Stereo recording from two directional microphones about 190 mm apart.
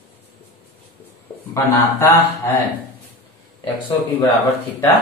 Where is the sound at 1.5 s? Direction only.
10° left (ahead or behind).